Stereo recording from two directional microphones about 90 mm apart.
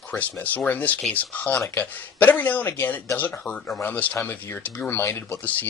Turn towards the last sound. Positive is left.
turn(degrees=30)  # may be behind; listen again after turning